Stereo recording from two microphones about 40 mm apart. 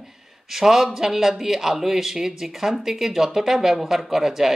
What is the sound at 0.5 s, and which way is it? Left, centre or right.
Speech, centre.